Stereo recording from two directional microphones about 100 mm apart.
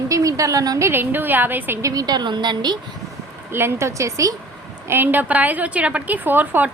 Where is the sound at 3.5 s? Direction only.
25° right (ahead or behind).